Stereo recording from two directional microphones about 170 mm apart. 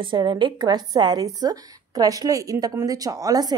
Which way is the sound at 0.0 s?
30° right (ahead or behind).